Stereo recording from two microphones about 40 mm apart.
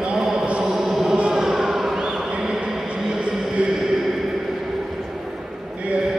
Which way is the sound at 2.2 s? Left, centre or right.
Right.